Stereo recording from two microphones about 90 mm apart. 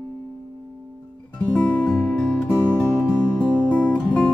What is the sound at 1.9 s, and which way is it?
Music, 5° left (ahead or behind).